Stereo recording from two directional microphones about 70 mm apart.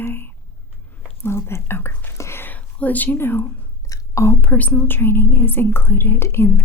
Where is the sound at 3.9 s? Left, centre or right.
Left.